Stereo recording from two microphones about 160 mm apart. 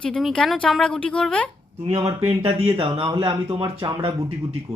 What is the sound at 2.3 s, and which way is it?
Speech, 35° right (ahead or behind).